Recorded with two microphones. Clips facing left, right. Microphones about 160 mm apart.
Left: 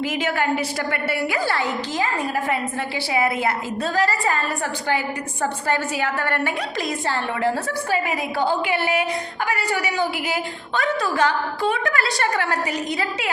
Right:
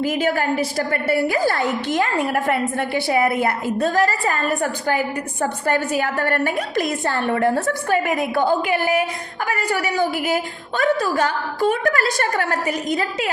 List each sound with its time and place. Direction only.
0.0 s a woman's voice: 45° right (ahead or behind)